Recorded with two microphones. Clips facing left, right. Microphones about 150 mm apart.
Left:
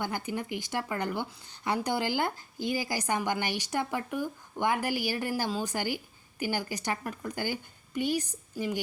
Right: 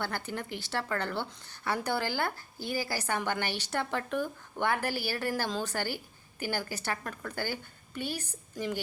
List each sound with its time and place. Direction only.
0.0 s a woman's voice: 10° left (ahead or behind)